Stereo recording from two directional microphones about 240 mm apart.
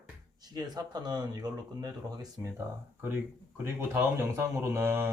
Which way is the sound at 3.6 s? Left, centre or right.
Centre.